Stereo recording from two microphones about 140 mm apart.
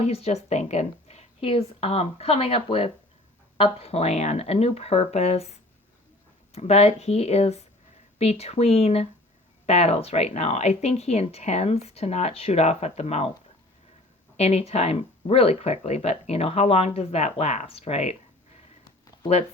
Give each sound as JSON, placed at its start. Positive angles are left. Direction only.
{"t": 0.0, "sound": "speech", "side_deg": 45}
{"t": 14.3, "sound": "speech", "side_deg": 50}